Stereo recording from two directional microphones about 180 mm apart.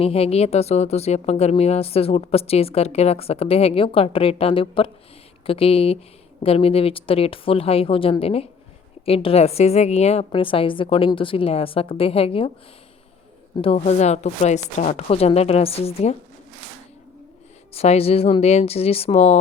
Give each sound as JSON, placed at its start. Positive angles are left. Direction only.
{"t": 0.0, "sound": "speech", "side_deg": 35}
{"t": 13.6, "sound": "speech", "side_deg": 35}
{"t": 17.7, "sound": "speech", "side_deg": 35}